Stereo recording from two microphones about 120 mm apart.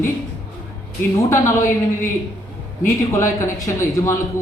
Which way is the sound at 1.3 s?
20° left (ahead or behind).